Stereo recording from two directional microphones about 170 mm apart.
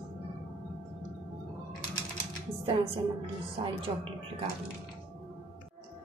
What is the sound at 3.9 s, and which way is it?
Speech, 30° right (ahead or behind).